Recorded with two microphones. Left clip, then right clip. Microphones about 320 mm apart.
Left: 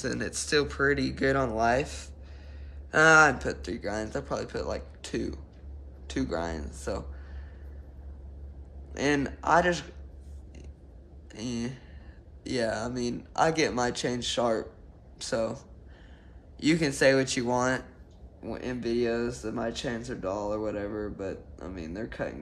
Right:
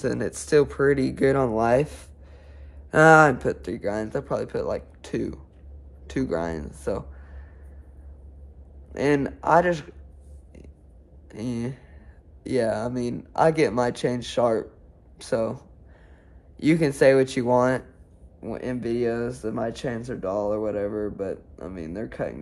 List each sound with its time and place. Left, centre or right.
0.0 s speech: centre
8.9 s speech: right
11.2 s speech: right